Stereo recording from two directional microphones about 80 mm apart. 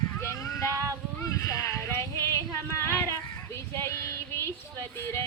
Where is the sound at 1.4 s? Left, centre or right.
Left.